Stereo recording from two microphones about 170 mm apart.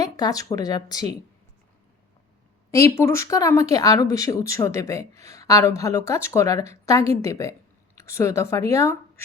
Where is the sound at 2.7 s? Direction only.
15° left (ahead or behind).